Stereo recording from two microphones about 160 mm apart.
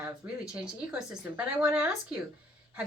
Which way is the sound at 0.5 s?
5° right (ahead or behind).